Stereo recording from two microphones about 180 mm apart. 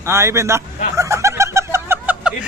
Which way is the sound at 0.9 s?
15° right (ahead or behind).